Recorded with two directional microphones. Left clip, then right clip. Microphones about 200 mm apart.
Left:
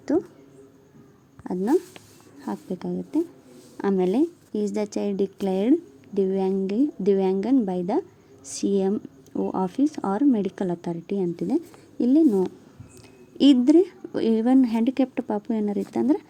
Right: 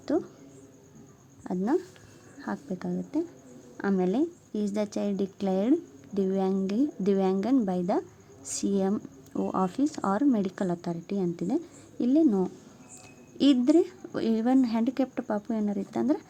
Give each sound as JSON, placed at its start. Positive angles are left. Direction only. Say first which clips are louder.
{"t": 0.1, "sound": "a woman's voice", "louder": "left 4 dB", "side_deg": 10}
{"t": 1.5, "sound": "a woman's voice", "louder": "left 5 dB", "side_deg": 10}